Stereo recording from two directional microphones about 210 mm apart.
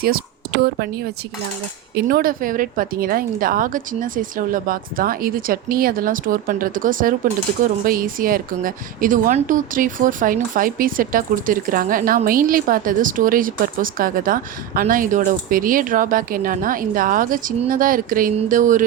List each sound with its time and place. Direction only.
0.0 s speech: 45° right (ahead or behind)
2.0 s speech: 45° right (ahead or behind)